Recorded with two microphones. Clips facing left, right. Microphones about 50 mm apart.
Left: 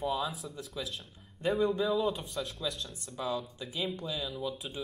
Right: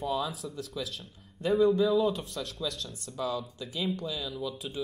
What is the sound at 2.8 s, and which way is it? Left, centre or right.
Speech, left.